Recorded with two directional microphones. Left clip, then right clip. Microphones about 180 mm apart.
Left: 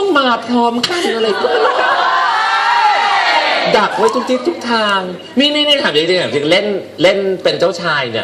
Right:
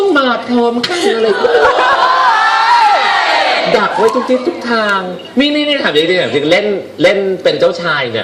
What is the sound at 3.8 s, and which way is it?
A man's voice, 50° left (ahead or behind).